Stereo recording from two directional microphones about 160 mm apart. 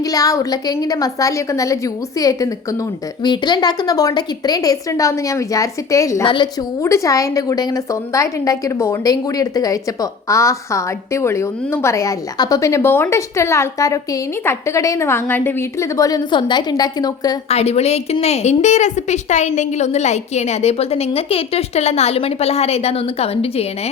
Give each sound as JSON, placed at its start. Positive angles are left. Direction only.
{"t": 0.0, "sound": "a woman's voice", "side_deg": 20}
{"t": 6.2, "sound": "a woman's voice", "side_deg": 30}
{"t": 6.8, "sound": "a woman's voice", "side_deg": 20}
{"t": 17.5, "sound": "a woman's voice", "side_deg": 40}